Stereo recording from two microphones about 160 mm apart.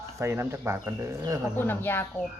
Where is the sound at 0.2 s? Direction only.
15° right (ahead or behind).